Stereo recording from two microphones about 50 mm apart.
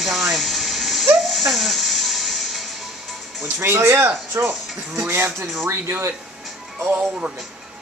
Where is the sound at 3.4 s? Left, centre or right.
Right.